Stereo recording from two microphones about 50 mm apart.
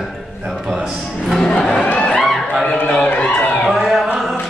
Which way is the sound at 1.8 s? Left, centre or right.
Left.